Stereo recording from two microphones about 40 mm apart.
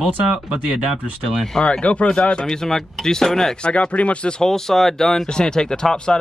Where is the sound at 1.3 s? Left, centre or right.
Centre.